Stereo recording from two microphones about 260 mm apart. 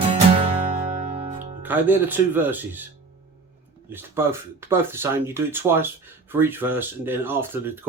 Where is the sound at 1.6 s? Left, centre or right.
Centre.